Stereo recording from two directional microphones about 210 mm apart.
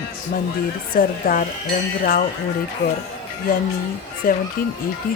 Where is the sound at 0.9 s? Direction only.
40° left (ahead or behind).